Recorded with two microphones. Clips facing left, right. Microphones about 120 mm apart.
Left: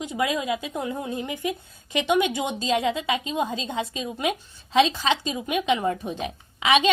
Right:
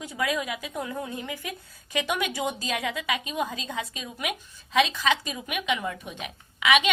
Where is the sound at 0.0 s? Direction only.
25° left (ahead or behind).